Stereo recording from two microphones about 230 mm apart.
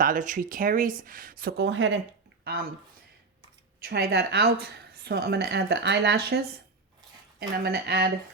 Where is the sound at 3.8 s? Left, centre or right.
Right.